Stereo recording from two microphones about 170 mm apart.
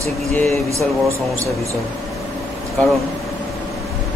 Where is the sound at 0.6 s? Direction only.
15° right (ahead or behind).